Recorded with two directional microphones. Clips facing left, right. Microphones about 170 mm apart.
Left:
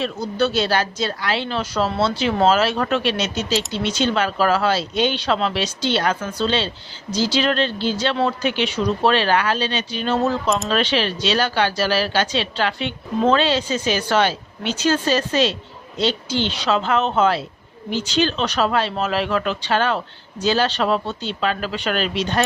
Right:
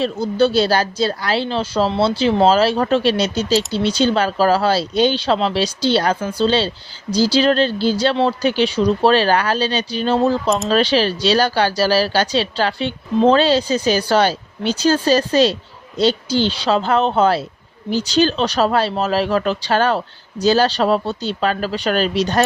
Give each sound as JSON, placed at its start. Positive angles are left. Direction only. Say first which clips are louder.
{"t": 0.0, "sound": "speech", "louder": "right 5 dB", "side_deg": -30}